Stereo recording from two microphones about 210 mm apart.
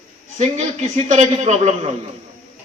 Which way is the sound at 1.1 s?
35° right (ahead or behind).